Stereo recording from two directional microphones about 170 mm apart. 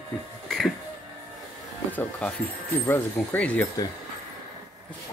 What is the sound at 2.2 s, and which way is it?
Speech, 10° left (ahead or behind).